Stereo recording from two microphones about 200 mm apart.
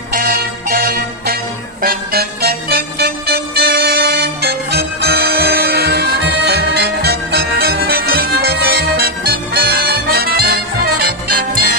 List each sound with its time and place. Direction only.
0.1 s music: 45° right (ahead or behind)